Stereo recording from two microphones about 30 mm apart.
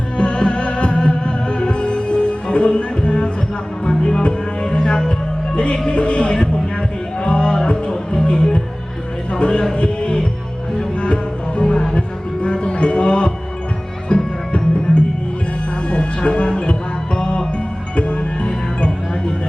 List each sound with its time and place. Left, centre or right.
0.2 s music: left
5.9 s music: left
15.9 s a sound: left
17.2 s music: left